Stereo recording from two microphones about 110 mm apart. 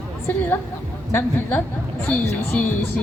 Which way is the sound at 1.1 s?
20° left (ahead or behind).